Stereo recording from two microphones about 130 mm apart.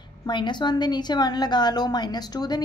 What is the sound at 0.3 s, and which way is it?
A woman's voice, 35° left (ahead or behind).